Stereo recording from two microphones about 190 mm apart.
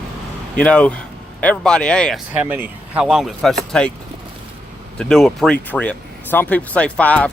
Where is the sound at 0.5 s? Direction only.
5° left (ahead or behind).